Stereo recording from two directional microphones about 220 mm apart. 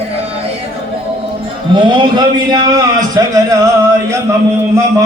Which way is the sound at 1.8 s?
20° right (ahead or behind).